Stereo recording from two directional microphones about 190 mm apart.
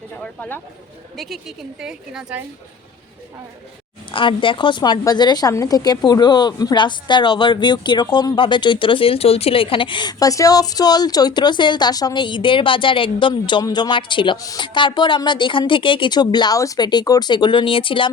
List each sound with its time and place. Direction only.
0.2 s a woman's voice: 10° left (ahead or behind)
4.1 s a woman's voice: 25° left (ahead or behind)